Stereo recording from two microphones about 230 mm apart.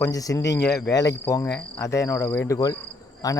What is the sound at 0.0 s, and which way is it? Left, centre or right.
Speech, centre.